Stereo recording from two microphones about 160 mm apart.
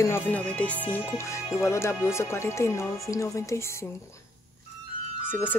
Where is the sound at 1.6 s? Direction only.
15° left (ahead or behind).